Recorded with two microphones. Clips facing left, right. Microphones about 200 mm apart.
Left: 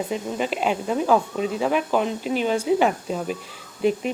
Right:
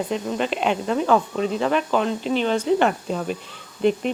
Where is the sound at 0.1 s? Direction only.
5° left (ahead or behind).